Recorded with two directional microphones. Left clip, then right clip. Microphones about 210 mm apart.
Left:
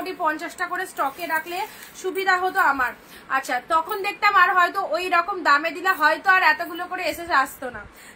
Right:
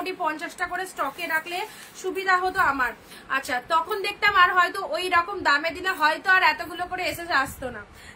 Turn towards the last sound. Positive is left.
turn(degrees=-20)  # may be behind; listen again after turning